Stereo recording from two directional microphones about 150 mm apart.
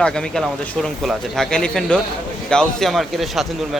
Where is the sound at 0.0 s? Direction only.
5° left (ahead or behind).